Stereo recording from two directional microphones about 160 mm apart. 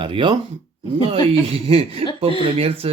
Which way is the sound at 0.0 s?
30° right (ahead or behind).